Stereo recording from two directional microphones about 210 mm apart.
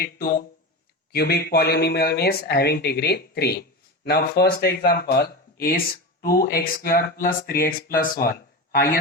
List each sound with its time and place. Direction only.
0.0 s speech: 45° left (ahead or behind)